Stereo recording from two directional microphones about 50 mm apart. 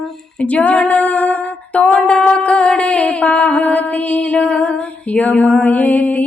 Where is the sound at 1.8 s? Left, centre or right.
Centre.